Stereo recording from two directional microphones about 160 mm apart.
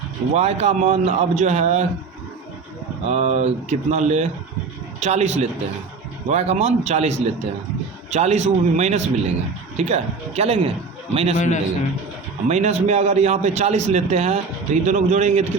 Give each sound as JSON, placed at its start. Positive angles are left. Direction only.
{"t": 0.3, "sound": "a man's voice", "side_deg": -40}
{"t": 3.1, "sound": "a man's voice", "side_deg": -45}
{"t": 11.3, "sound": "a man's voice", "side_deg": 50}
{"t": 12.5, "sound": "a man's voice", "side_deg": -45}